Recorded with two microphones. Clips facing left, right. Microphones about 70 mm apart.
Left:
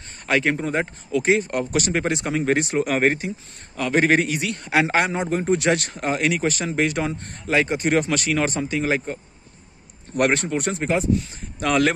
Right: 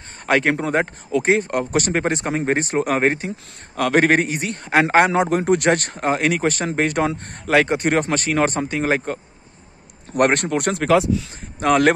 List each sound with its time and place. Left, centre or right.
0.3 s speech: right
3.7 s speech: right
4.8 s speech: right
5.7 s speech: right
11.6 s speech: right